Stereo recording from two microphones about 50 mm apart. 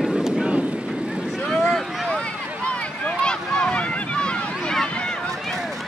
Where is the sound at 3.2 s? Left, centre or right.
Left.